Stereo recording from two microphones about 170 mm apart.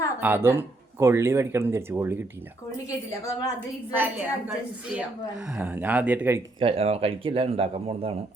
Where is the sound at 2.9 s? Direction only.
20° left (ahead or behind).